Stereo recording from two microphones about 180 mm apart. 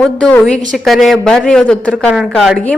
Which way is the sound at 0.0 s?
5° left (ahead or behind).